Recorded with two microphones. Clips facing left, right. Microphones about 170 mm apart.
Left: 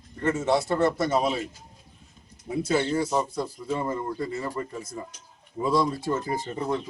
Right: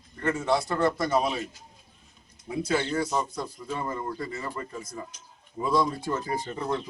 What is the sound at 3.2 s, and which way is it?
Speech, 30° left (ahead or behind).